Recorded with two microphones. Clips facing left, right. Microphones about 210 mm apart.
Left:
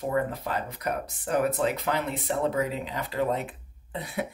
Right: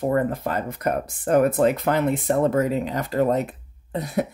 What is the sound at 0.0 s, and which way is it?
Speech, 50° right (ahead or behind).